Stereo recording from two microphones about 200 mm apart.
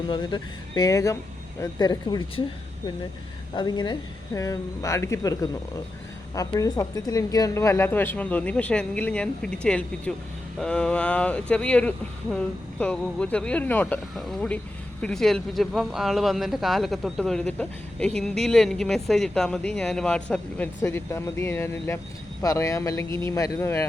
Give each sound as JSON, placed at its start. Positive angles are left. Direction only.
{"t": 0.1, "sound": "speech", "side_deg": 20}
{"t": 3.5, "sound": "speech", "side_deg": 20}